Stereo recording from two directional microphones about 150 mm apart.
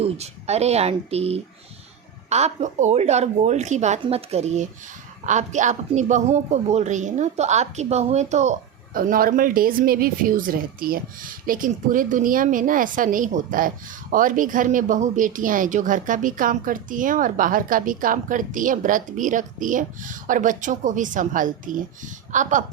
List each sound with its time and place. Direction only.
0.0 s a woman's voice: 45° right (ahead or behind)
8.9 s speech: 70° right (ahead or behind)